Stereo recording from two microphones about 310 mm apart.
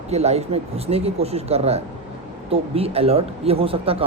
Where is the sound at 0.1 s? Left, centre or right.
Centre.